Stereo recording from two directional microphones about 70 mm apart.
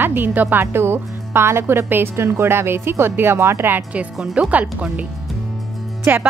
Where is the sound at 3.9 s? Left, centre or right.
Centre.